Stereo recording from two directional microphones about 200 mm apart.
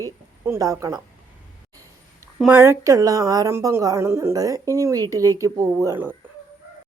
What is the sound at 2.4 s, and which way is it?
A woman's voice, 10° right (ahead or behind).